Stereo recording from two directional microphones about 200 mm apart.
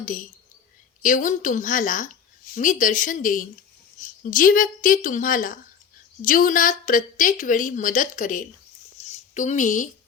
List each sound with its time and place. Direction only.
0.0 s a woman's voice: 40° left (ahead or behind)